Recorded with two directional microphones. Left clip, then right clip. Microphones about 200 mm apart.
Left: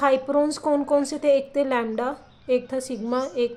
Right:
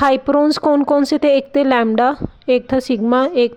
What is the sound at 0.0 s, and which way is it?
A woman's voice, 40° right (ahead or behind).